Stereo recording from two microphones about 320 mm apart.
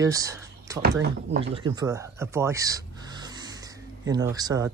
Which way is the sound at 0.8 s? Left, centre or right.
Right.